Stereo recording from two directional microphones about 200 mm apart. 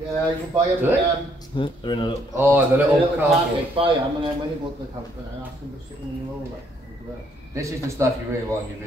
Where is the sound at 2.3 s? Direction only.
10° right (ahead or behind).